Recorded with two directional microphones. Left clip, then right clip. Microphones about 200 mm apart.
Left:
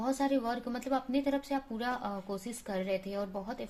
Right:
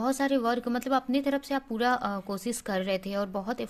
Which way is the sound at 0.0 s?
40° right (ahead or behind).